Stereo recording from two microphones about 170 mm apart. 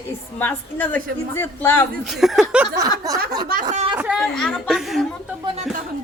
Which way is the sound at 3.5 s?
50° right (ahead or behind).